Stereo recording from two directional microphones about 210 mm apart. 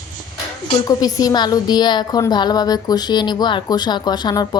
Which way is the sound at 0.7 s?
20° left (ahead or behind).